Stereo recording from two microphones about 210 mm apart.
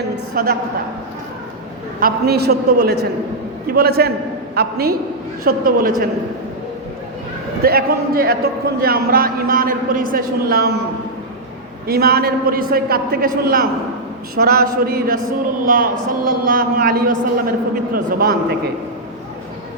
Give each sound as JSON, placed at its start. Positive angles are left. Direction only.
{"t": 0.4, "sound": "a man's voice", "side_deg": -45}
{"t": 2.0, "sound": "a man's voice", "side_deg": -45}
{"t": 7.6, "sound": "a man's voice", "side_deg": -45}
{"t": 11.9, "sound": "a man's voice", "side_deg": -45}